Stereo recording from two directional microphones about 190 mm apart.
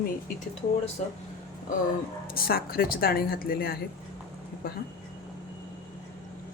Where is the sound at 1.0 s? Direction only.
40° left (ahead or behind).